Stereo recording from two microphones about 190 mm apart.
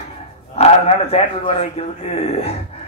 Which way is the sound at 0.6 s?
35° left (ahead or behind).